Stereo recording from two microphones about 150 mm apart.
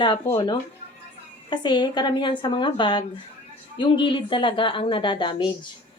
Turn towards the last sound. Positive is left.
turn(degrees=30)  # may be behind; listen again after turning